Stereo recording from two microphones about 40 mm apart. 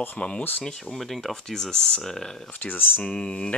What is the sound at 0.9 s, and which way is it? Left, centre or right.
Speech, centre.